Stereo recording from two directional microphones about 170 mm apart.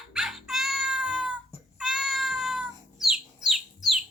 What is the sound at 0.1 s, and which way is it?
Cat, centre (ahead or behind).